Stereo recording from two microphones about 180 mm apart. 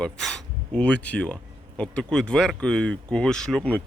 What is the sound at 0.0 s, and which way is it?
Speech, centre (ahead or behind).